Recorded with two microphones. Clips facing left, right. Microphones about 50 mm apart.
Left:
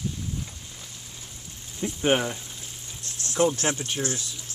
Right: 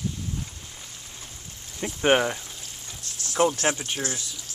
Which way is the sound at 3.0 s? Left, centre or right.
Left.